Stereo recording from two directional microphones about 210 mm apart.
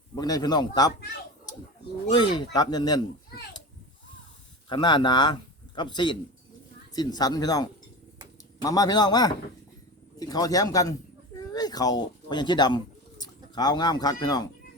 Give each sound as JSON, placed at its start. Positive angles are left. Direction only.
{"t": 0.2, "sound": "speech", "side_deg": 20}
{"t": 2.0, "sound": "speech", "side_deg": 20}
{"t": 4.7, "sound": "a man's voice", "side_deg": 20}